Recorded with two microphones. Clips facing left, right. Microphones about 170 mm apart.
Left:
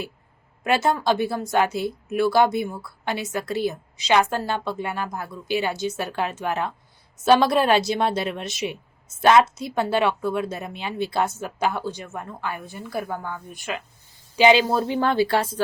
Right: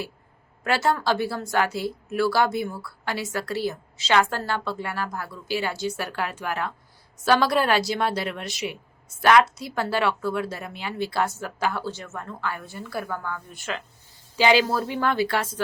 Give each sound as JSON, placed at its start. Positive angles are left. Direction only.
{"t": 0.6, "sound": "speech", "side_deg": 20}